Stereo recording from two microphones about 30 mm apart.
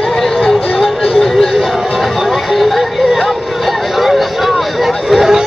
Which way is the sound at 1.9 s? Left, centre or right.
Centre.